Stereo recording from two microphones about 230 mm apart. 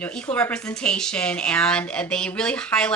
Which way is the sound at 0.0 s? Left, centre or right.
Centre.